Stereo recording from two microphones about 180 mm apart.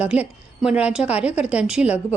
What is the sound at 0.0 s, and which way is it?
A woman's voice, 5° right (ahead or behind).